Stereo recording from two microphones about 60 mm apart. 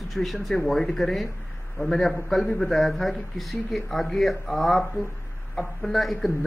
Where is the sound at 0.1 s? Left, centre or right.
Centre.